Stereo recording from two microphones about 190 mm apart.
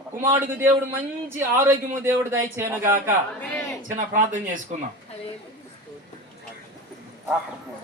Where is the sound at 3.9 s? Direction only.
40° right (ahead or behind).